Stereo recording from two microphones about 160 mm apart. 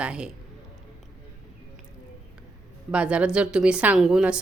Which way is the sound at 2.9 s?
10° right (ahead or behind).